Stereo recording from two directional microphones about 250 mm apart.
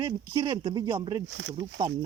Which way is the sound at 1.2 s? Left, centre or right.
Right.